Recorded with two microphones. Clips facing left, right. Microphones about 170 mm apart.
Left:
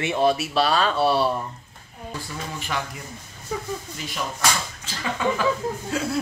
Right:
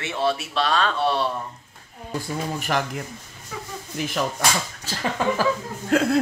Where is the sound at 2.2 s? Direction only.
50° right (ahead or behind).